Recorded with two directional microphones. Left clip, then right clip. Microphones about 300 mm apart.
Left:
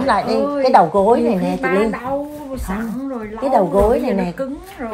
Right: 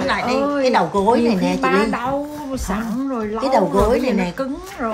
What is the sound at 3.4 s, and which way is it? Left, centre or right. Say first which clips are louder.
Speech: left 2 dB; centre.